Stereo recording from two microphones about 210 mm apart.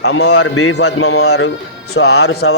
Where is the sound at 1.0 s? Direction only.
90° left.